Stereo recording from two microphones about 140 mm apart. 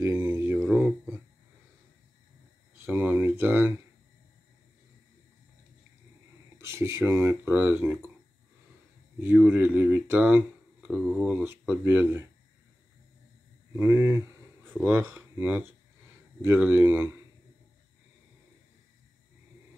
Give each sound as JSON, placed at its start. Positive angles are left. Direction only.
{"t": 0.0, "sound": "a sound", "side_deg": -15}
{"t": 2.8, "sound": "speech", "side_deg": -15}
{"t": 6.6, "sound": "speech", "side_deg": -20}
{"t": 9.2, "sound": "speech", "side_deg": -10}
{"t": 13.7, "sound": "speech", "side_deg": -15}